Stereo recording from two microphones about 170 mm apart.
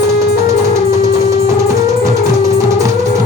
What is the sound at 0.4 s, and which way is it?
Music, 20° right (ahead or behind).